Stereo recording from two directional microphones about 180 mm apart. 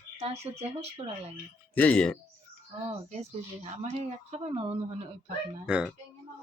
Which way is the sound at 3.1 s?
35° right (ahead or behind).